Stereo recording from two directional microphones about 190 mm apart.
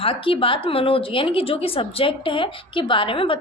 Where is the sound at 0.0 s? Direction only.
25° left (ahead or behind).